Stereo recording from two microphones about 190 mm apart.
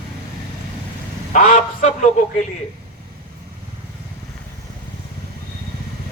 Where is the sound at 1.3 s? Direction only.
45° left (ahead or behind).